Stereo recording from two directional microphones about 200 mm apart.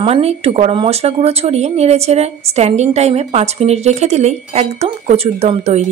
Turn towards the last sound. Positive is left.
turn(degrees=-30)  # may be behind; listen again after turning